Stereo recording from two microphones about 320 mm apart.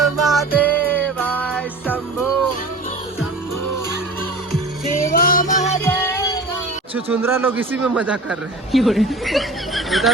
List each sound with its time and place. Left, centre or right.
0.0 s music: centre
5.1 s music: left
5.8 s child singing: centre
6.9 s speech: centre